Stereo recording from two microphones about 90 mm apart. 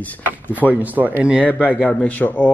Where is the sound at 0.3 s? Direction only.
15° right (ahead or behind).